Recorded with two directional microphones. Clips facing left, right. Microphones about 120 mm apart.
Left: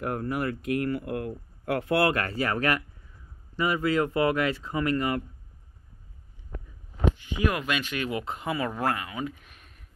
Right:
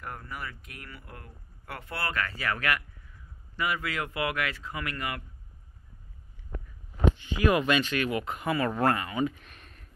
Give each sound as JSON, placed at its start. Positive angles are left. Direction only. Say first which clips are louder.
{"t": 0.3, "sound": "speech", "louder": "left 13 dB", "side_deg": 60}
{"t": 2.0, "sound": "speech", "louder": "left 5 dB", "side_deg": 45}
{"t": 7.4, "sound": "speech", "louder": "right 4 dB", "side_deg": 0}
{"t": 7.9, "sound": "speech", "louder": "right 1 dB", "side_deg": 25}
{"t": 8.6, "sound": "speech", "louder": "right 2 dB", "side_deg": 5}